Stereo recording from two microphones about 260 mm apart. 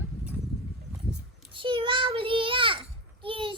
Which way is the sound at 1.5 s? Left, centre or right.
Centre.